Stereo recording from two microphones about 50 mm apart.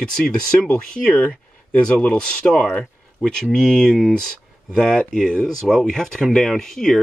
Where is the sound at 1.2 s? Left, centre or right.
Left.